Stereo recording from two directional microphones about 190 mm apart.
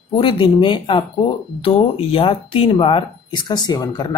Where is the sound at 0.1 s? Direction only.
25° left (ahead or behind).